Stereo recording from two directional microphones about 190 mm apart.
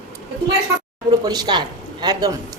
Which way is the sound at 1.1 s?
20° right (ahead or behind).